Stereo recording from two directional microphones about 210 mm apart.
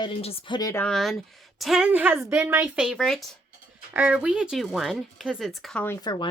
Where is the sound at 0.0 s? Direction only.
30° left (ahead or behind).